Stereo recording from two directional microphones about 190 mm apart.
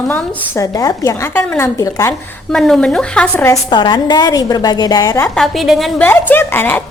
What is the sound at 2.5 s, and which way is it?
A woman's voice, 5° left (ahead or behind).